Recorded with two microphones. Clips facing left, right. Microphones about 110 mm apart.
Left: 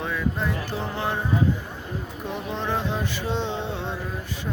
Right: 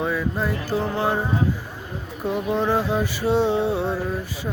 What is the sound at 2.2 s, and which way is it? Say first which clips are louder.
Music: right 8 dB; 5° right (ahead or behind).